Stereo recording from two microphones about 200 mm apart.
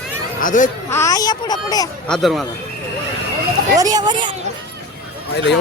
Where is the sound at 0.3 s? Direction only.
40° left (ahead or behind).